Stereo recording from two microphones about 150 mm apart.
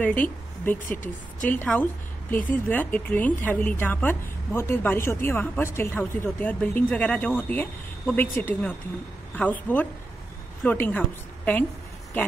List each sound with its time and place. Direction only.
0.0 s speech: 10° left (ahead or behind)
0.8 s speech: 60° left (ahead or behind)
1.5 s a woman's voice: 10° left (ahead or behind)